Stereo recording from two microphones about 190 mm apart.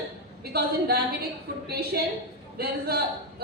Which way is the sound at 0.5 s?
55° right (ahead or behind).